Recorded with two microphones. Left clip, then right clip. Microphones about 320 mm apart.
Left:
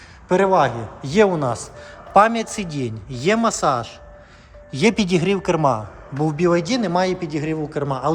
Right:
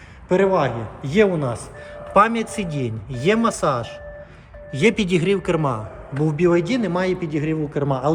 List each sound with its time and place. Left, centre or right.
0.3 s a man's voice: centre
0.6 s a man's voice: left
2.1 s a man's voice: centre